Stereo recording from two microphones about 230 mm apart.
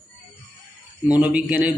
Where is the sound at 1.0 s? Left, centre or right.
Centre.